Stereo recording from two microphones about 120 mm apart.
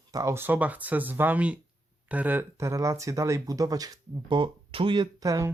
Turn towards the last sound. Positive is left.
turn(degrees=-30)  # may be behind; listen again after turning